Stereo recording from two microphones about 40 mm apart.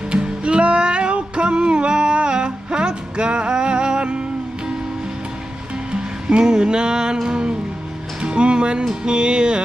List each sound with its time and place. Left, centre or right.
0.1 s music: right
5.9 s music: right